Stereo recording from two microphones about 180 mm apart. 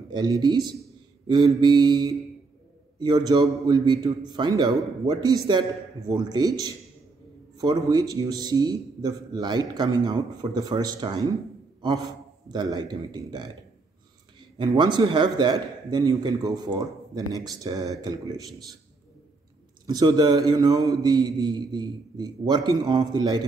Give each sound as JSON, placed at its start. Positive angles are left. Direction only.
{"t": 0.1, "sound": "a man's voice", "side_deg": -25}
{"t": 12.4, "sound": "a man's voice", "side_deg": -20}
{"t": 14.6, "sound": "a man's voice", "side_deg": -25}
{"t": 19.9, "sound": "a man's voice", "side_deg": -20}